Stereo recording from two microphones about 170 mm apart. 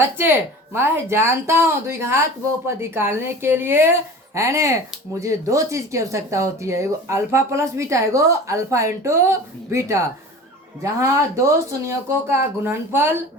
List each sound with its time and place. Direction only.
0.2 s speech: 15° right (ahead or behind)